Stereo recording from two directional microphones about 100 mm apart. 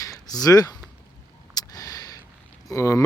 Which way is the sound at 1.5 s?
40° left (ahead or behind).